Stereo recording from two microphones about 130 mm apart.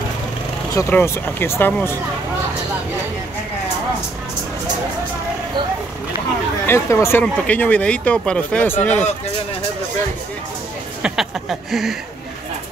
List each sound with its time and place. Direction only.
0.7 s speech: 20° left (ahead or behind)
6.6 s speech: 20° left (ahead or behind)
11.0 s a sound: 5° right (ahead or behind)